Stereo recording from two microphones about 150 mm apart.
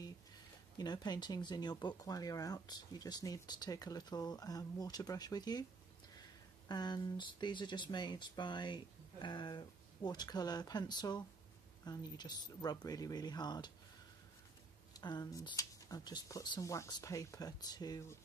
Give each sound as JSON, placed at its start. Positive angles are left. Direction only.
{"t": 0.7, "sound": "speech", "side_deg": 25}
{"t": 6.7, "sound": "speech", "side_deg": 30}
{"t": 15.0, "sound": "speech", "side_deg": 25}